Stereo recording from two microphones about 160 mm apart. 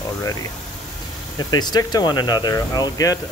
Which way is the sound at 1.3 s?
25° left (ahead or behind).